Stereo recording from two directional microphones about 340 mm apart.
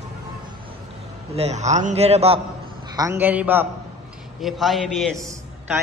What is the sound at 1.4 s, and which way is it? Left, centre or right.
A man's voice, centre.